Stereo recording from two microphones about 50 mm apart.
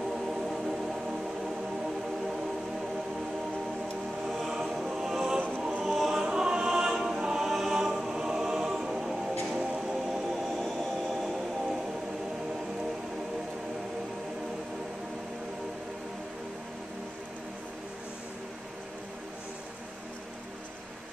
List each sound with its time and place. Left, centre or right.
0.1 s music: centre
4.4 s music: centre
5.6 s choir: right
5.9 s choir: centre
9.6 s music: centre
10.6 s a sound: centre